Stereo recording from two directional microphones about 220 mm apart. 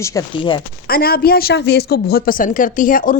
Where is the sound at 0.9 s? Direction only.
45° left (ahead or behind).